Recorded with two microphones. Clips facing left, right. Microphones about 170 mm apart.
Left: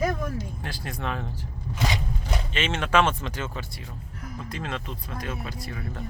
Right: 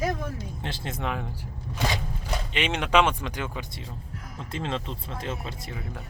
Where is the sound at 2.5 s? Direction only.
15° right (ahead or behind).